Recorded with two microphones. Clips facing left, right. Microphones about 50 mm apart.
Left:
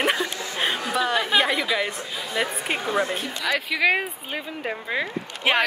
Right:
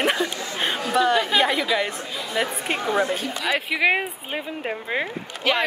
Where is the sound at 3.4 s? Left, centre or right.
Centre.